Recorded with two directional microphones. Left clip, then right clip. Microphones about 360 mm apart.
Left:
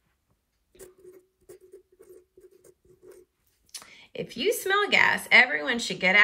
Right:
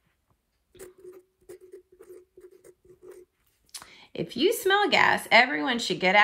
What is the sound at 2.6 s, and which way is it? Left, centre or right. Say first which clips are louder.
Patter: right 3 dB; centre.